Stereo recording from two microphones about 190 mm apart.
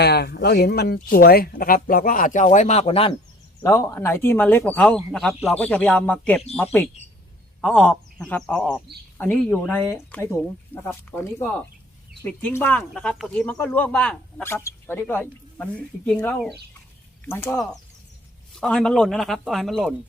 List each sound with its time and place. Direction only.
0.0 s speech: 60° left (ahead or behind); by 3.2 s 30° left (ahead or behind)
3.6 s speech: 15° left (ahead or behind)
7.6 s speech: 5° left (ahead or behind)